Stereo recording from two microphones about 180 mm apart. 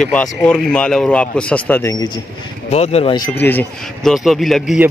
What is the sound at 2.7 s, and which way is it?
Speech, 35° left (ahead or behind).